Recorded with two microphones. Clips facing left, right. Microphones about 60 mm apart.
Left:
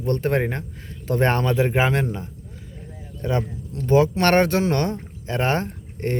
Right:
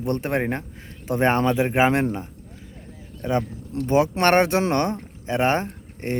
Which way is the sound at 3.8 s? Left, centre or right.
Right.